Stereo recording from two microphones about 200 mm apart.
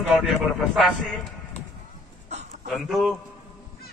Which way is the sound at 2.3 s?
35° right (ahead or behind).